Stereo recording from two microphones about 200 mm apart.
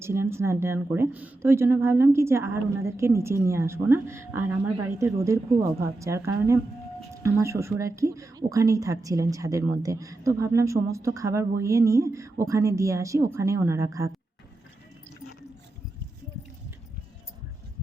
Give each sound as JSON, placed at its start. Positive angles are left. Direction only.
{"t": 0.0, "sound": "speech", "side_deg": -15}